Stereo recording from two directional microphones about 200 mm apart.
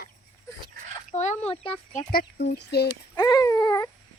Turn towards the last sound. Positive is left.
turn(degrees=20)  # may be behind; listen again after turning